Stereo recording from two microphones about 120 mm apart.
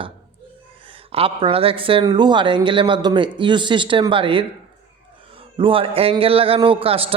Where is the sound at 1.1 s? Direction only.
50° right (ahead or behind).